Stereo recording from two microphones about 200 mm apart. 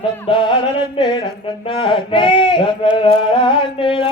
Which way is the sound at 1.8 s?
25° left (ahead or behind).